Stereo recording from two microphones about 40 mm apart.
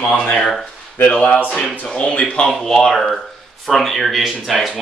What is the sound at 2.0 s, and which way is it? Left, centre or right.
Speech, left.